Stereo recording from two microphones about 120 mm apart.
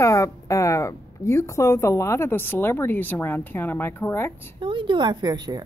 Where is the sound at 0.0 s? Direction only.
25° left (ahead or behind).